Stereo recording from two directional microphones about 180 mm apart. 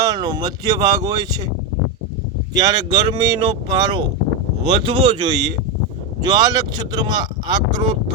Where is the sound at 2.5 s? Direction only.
25° right (ahead or behind).